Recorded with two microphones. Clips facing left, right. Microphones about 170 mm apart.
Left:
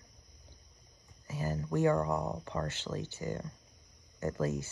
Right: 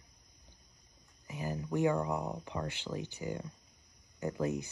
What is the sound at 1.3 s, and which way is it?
Speech, 15° right (ahead or behind).